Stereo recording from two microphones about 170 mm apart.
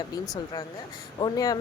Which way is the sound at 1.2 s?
20° left (ahead or behind).